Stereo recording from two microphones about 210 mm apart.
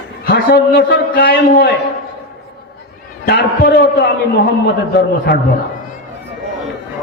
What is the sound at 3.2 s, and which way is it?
A man's voice, 50° left (ahead or behind).